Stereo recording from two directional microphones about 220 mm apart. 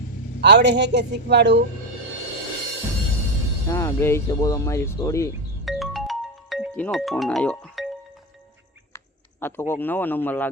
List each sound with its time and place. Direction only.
0.4 s speech: 50° right (ahead or behind)
3.7 s speech: 10° left (ahead or behind)
5.6 s music: centre (ahead or behind)
9.4 s speech: 10° left (ahead or behind)